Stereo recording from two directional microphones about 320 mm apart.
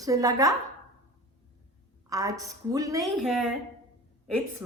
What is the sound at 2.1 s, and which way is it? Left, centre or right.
A woman's voice, centre.